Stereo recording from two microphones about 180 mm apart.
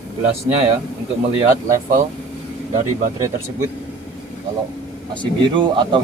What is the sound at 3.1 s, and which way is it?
Speech, 20° right (ahead or behind).